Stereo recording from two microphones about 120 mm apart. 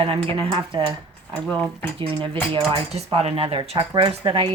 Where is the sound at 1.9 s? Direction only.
45° right (ahead or behind).